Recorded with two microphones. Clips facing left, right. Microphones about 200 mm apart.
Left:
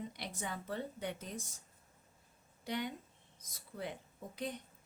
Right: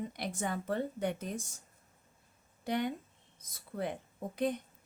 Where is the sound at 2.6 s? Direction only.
55° right (ahead or behind).